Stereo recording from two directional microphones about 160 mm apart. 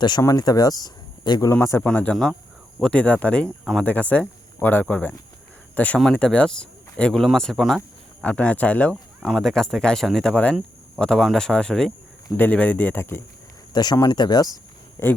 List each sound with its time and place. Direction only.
0.0 s speech: 25° left (ahead or behind)
3.6 s speech: centre (ahead or behind)
3.8 s speech: 10° left (ahead or behind)